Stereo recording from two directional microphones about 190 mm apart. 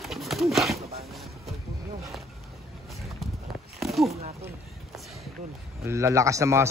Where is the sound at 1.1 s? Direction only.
Centre (ahead or behind).